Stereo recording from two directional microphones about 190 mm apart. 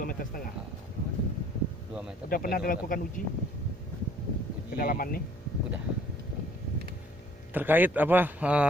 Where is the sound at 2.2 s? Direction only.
50° left (ahead or behind).